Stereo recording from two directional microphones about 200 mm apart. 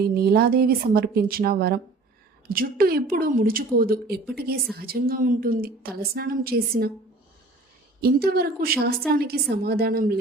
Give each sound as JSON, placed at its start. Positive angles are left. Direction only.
{"t": 0.0, "sound": "a woman's voice", "side_deg": -50}
{"t": 8.0, "sound": "a woman's voice", "side_deg": -50}